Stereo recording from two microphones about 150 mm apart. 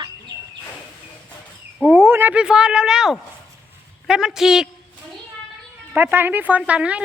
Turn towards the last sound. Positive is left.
turn(degrees=-10)  # may be behind; listen again after turning